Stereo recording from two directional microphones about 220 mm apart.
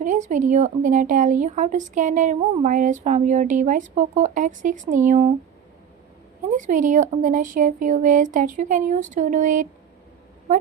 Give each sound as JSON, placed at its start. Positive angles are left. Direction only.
{"t": 0.0, "sound": "speech", "side_deg": -35}
{"t": 6.6, "sound": "speech", "side_deg": -35}